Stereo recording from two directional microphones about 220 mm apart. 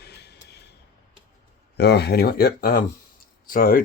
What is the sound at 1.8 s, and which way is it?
Speech, 50° left (ahead or behind).